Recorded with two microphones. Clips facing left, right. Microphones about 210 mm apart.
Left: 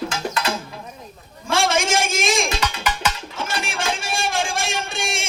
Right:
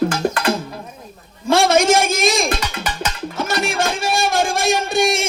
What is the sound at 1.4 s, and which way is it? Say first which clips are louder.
A man's voice: right 7 dB; 35° right (ahead or behind).